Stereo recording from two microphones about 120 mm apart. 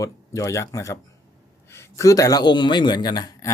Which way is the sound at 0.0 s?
25° left (ahead or behind).